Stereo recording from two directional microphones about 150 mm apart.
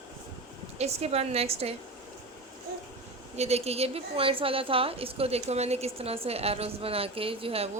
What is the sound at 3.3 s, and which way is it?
A woman's voice, 45° right (ahead or behind).